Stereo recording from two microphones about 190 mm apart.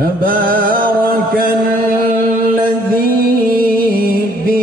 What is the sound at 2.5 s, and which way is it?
Music, 50° right (ahead or behind).